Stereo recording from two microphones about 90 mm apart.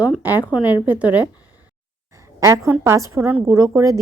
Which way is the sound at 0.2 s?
20° right (ahead or behind).